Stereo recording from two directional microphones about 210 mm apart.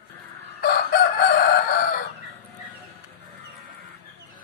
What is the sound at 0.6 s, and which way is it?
Chicken, 50° left (ahead or behind).